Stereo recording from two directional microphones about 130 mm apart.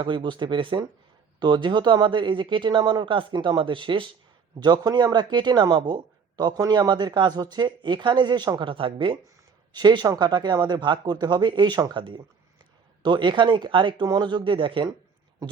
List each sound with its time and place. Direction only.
0.0 s a man's voice: 40° right (ahead or behind)